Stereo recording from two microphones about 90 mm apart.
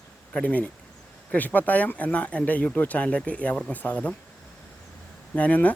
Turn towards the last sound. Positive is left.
turn(degrees=15)  # may be behind; listen again after turning